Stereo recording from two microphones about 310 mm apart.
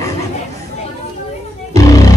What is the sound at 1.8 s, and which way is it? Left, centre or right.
Music, centre.